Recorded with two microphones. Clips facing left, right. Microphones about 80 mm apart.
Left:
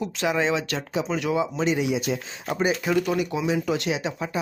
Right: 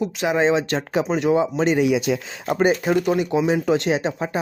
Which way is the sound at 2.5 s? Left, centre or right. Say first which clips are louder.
Right 6 dB; right.